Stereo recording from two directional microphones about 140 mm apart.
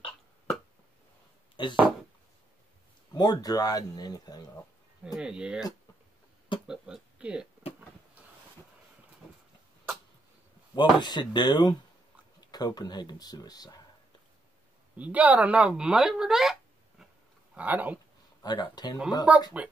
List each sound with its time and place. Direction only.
1.6 s speech: 35° left (ahead or behind)
3.1 s speech: 30° left (ahead or behind)
5.0 s speech: 5° right (ahead or behind)
6.7 s speech: 5° right (ahead or behind)
10.7 s speech: 30° left (ahead or behind)
15.0 s speech: 10° right (ahead or behind)
17.6 s speech: 10° right (ahead or behind)
18.4 s speech: 30° left (ahead or behind)
19.3 s speech: 10° right (ahead or behind)